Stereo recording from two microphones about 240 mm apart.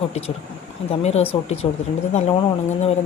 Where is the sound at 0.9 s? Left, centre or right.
Left.